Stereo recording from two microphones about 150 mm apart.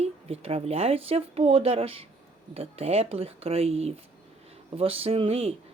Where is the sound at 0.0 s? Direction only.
45° right (ahead or behind).